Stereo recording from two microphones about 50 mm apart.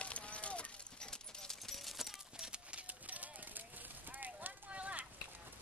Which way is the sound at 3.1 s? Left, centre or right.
Right.